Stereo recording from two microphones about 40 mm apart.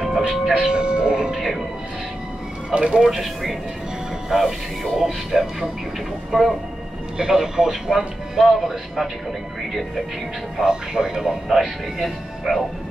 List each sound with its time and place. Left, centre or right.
0.3 s speech: centre
0.7 s speech: right
1.3 s speech: centre
2.7 s speech: right
3.0 s speech: centre
10.6 s speech: centre
11.2 s speech: centre